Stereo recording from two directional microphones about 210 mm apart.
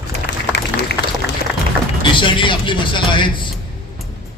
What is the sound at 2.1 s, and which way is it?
Speech, 25° left (ahead or behind).